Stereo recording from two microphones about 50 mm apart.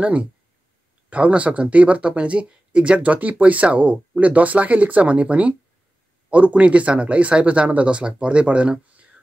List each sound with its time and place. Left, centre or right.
0.0 s speech: right